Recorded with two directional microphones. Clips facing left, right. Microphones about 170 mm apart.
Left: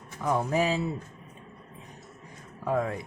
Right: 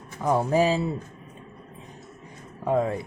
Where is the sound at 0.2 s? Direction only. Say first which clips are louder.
Right 5 dB; 30° right (ahead or behind).